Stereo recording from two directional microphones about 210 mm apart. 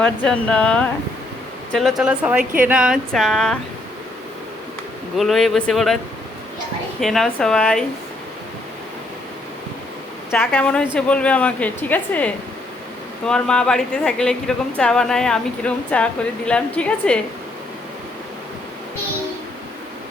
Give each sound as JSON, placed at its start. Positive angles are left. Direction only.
{"t": 0.0, "sound": "a woman's voice", "side_deg": 5}
{"t": 5.1, "sound": "a woman's voice", "side_deg": 0}
{"t": 7.0, "sound": "a woman's voice", "side_deg": 0}
{"t": 10.3, "sound": "a woman's voice", "side_deg": 10}